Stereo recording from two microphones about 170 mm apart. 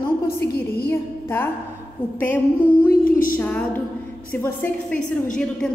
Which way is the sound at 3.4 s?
10° left (ahead or behind).